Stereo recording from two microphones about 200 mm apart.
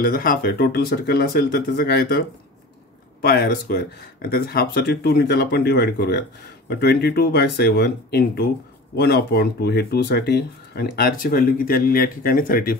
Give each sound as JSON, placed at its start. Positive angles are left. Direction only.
{"t": 0.0, "sound": "speech", "side_deg": 45}